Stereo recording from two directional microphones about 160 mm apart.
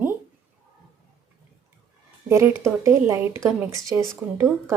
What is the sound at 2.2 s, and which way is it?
Speech, 15° right (ahead or behind).